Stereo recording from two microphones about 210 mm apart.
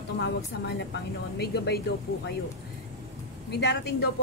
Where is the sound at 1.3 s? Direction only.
50° left (ahead or behind).